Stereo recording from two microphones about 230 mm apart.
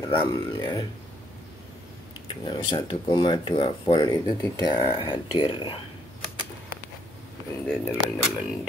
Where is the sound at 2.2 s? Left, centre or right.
Left.